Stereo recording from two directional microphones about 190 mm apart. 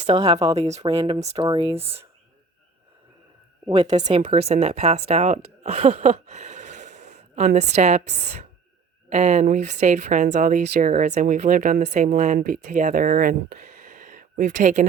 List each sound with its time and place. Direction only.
0.0 s speech: 35° right (ahead or behind)
3.7 s speech: 35° right (ahead or behind)
9.0 s speech: 35° right (ahead or behind)